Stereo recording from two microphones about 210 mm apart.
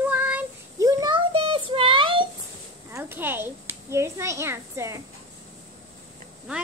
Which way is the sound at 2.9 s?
10° right (ahead or behind).